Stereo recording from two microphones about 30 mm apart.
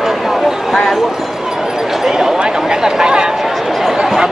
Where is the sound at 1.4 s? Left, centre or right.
Centre.